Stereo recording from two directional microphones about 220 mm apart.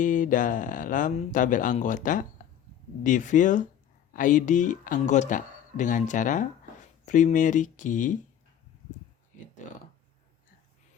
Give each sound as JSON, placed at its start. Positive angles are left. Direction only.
{"t": 0.0, "sound": "speech", "side_deg": 35}